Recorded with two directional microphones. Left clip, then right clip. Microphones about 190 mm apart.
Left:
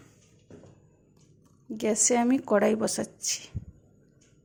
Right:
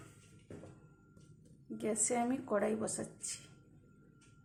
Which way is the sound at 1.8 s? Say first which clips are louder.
Left 10 dB; 45° left (ahead or behind).